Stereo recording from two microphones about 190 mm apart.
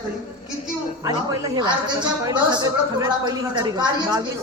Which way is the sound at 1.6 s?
25° right (ahead or behind).